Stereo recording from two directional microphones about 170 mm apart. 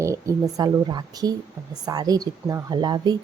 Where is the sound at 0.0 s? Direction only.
20° right (ahead or behind).